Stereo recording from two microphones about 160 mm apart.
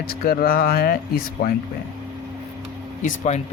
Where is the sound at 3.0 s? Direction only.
45° left (ahead or behind).